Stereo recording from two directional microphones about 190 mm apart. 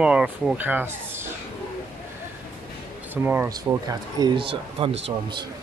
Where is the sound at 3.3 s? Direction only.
10° right (ahead or behind); by 4.9 s 30° right (ahead or behind).